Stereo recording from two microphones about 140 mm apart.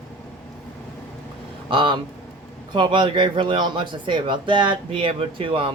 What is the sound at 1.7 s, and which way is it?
A man's voice, 35° right (ahead or behind).